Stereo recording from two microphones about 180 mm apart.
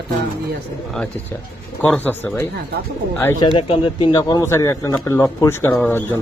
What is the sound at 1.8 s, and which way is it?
Speech, 10° left (ahead or behind).